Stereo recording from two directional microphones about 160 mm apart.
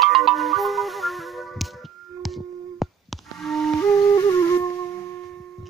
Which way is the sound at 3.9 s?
20° left (ahead or behind).